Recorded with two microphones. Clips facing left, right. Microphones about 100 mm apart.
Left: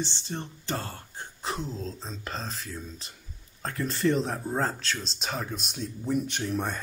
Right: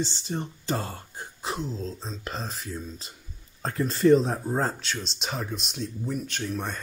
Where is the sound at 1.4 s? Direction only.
Centre (ahead or behind).